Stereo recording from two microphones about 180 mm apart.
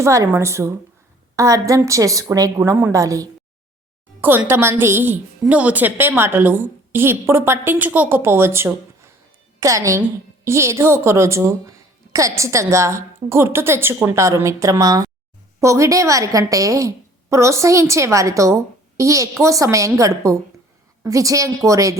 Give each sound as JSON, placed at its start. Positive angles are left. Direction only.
{"t": 0.0, "sound": "a woman's voice", "side_deg": -15}